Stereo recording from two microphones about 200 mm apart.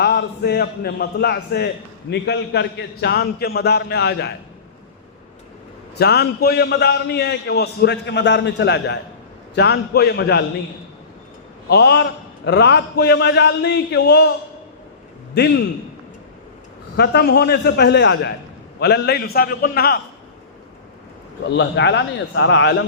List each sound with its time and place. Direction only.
0.0 s a man's voice: 55° left (ahead or behind)
6.0 s a man's voice: 55° left (ahead or behind)
11.7 s a man's voice: 55° left (ahead or behind)
17.0 s a man's voice: 55° left (ahead or behind)
21.4 s a man's voice: 60° left (ahead or behind)